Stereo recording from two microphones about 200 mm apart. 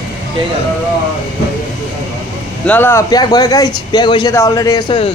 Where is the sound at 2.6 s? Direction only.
10° left (ahead or behind).